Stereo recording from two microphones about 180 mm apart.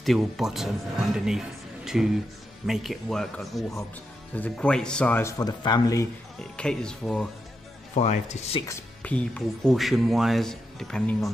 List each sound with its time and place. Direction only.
0.0 s speech: centre (ahead or behind)
5.4 s speech: 20° left (ahead or behind)
6.5 s speech: 5° left (ahead or behind)
7.9 s speech: 40° left (ahead or behind)
8.6 s speech: 10° left (ahead or behind)